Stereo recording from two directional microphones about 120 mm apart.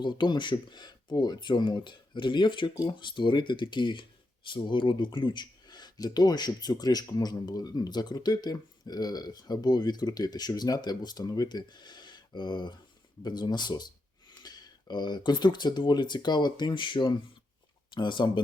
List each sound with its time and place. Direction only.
0.0 s speech: 40° left (ahead or behind)